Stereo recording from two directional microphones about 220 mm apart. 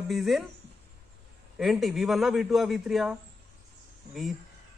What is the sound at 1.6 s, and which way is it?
Speech, centre (ahead or behind).